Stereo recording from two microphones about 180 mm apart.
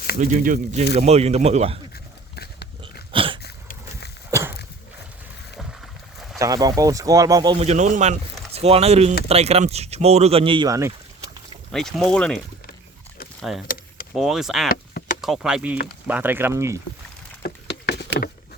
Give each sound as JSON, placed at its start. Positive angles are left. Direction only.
{"t": 0.2, "sound": "speech", "side_deg": -45}
{"t": 2.3, "sound": "pig", "side_deg": 65}
{"t": 3.1, "sound": "a sound", "side_deg": -30}
{"t": 3.4, "sound": "a sound", "side_deg": 65}
{"t": 4.3, "sound": "walk", "side_deg": -15}
{"t": 6.4, "sound": "speech", "side_deg": -20}
{"t": 7.6, "sound": "speech", "side_deg": -40}
{"t": 11.7, "sound": "speech", "side_deg": 0}
{"t": 13.5, "sound": "speech", "side_deg": 0}
{"t": 14.7, "sound": "a sound", "side_deg": 50}
{"t": 15.2, "sound": "speech", "side_deg": 0}
{"t": 17.4, "sound": "a sound", "side_deg": 70}